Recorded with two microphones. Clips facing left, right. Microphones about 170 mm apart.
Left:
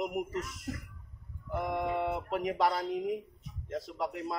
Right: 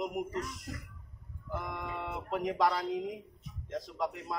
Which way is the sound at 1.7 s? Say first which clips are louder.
Left 8 dB; 5° left (ahead or behind).